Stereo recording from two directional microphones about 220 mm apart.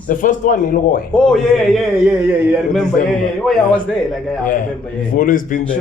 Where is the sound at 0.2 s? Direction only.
35° left (ahead or behind).